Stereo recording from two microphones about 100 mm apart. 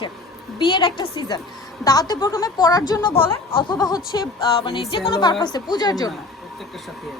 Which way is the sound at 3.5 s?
55° left (ahead or behind).